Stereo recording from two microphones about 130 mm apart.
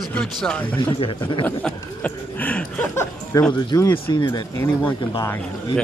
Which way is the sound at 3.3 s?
25° left (ahead or behind).